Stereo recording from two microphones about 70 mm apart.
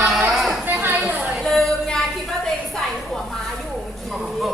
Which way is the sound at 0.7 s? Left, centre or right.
Right.